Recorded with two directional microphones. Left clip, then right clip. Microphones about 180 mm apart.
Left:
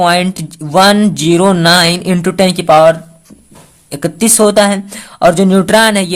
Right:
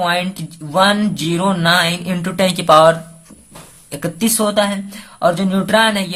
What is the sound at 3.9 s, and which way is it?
Speech, 30° left (ahead or behind).